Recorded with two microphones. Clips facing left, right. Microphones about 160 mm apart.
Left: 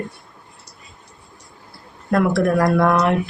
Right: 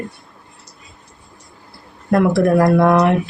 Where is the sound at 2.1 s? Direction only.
25° right (ahead or behind).